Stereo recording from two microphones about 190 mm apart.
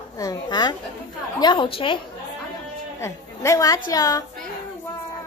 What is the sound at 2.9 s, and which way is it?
A woman's voice, 15° left (ahead or behind).